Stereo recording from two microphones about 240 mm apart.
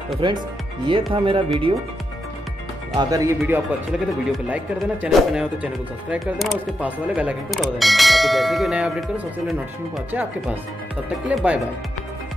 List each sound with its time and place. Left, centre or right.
0.2 s speech: right
3.0 s speech: centre